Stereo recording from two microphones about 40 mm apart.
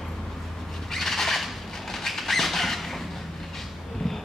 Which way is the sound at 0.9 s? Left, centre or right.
Centre.